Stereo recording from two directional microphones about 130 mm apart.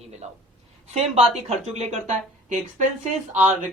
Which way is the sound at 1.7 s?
65° right (ahead or behind).